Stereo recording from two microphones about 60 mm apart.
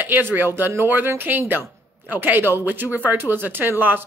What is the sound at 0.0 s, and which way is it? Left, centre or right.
A woman's voice, right.